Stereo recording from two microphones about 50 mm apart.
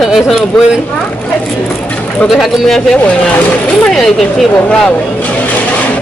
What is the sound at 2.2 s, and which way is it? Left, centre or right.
Speech, centre.